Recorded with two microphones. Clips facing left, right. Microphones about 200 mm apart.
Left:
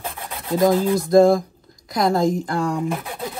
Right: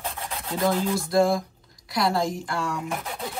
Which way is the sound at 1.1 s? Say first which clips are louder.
Left 8 dB; 45° left (ahead or behind).